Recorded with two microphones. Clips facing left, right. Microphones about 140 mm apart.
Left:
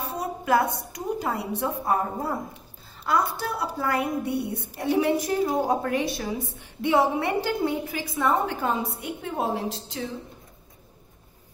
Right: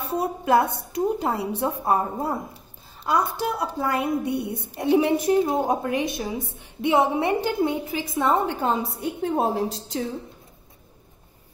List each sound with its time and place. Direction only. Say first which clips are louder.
0.2 s a woman's voice: right 2 dB; 30° right (ahead or behind)